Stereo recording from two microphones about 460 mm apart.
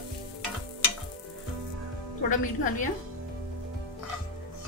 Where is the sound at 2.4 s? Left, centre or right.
Centre.